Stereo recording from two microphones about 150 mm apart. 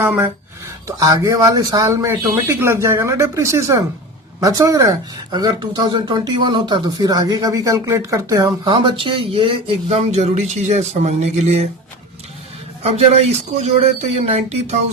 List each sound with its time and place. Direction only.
0.0 s speech: 10° right (ahead or behind)
0.9 s speech: 25° right (ahead or behind); by 11.7 s 45° right (ahead or behind)
12.8 s speech: 50° right (ahead or behind)